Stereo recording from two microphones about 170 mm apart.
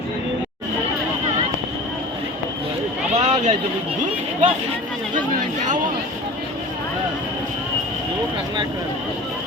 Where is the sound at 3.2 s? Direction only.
40° right (ahead or behind).